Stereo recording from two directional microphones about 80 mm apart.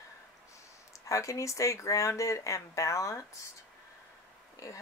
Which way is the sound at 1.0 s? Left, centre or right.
Left.